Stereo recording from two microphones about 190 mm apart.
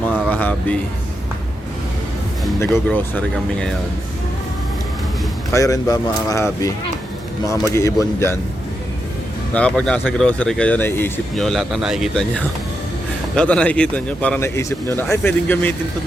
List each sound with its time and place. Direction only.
0.1 s a sound: 10° left (ahead or behind)
2.6 s speech: 10° left (ahead or behind)
5.5 s speech: 15° left (ahead or behind)
9.5 s speech: 5° left (ahead or behind)
11.3 s a man's voice: centre (ahead or behind)